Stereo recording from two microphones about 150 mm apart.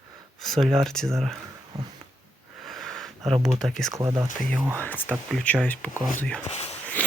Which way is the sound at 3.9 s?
20° right (ahead or behind).